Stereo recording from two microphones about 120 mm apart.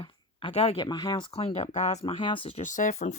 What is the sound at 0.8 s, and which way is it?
Speech, 35° left (ahead or behind).